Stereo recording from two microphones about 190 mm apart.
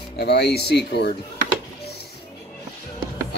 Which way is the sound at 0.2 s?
60° left (ahead or behind).